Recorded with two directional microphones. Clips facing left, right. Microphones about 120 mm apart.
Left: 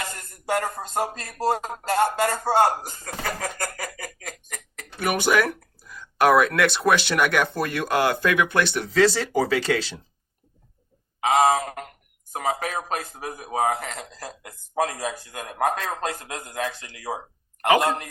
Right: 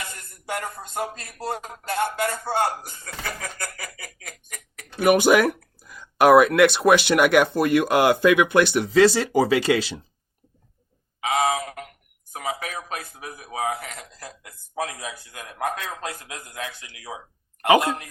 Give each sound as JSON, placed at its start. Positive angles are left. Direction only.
{"t": 0.0, "sound": "a sound", "side_deg": 45}
{"t": 0.9, "sound": "speech", "side_deg": 40}
{"t": 4.9, "sound": "speech", "side_deg": -15}
{"t": 11.3, "sound": "a man's voice", "side_deg": 40}